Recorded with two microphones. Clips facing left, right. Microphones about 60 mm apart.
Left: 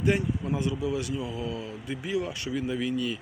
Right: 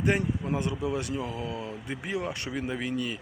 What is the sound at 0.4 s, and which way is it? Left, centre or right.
Speech, right.